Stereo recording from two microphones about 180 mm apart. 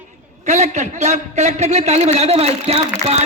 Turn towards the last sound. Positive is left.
turn(degrees=-35)  # may be behind; listen again after turning